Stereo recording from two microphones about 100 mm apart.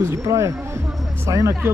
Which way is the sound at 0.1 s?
30° right (ahead or behind).